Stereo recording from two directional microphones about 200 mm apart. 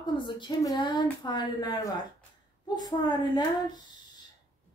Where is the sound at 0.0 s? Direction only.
25° left (ahead or behind).